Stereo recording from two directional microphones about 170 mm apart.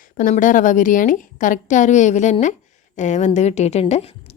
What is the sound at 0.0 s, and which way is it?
A woman's voice, 50° left (ahead or behind).